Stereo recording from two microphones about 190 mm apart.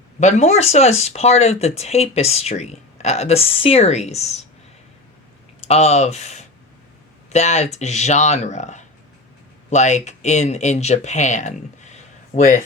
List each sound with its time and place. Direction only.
0.2 s speech: 35° left (ahead or behind)
5.5 s speech: 35° left (ahead or behind)